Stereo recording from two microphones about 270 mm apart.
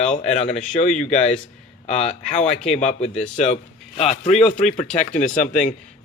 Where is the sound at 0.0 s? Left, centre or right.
Left.